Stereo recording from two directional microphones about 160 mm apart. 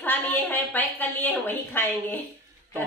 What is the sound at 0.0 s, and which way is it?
A woman's voice, 10° left (ahead or behind).